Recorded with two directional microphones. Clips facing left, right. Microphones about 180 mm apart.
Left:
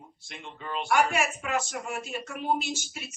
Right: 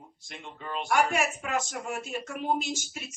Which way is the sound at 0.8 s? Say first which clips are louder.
Left 1 dB; 45° right (ahead or behind).